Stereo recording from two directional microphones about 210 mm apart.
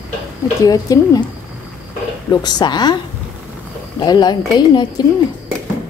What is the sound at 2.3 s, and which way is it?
Speech, 20° left (ahead or behind).